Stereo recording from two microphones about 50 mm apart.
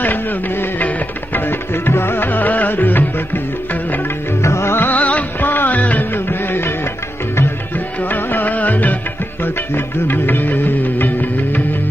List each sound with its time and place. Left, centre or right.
0.0 s music: left
1.9 s music: left
4.4 s music: left
4.7 s music of bollywood: left
6.1 s music: left
8.1 s music: left
10.0 s music: left